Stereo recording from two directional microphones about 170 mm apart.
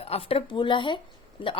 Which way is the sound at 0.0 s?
35° left (ahead or behind).